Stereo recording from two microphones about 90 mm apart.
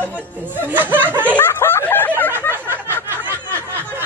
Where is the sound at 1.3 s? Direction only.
25° left (ahead or behind).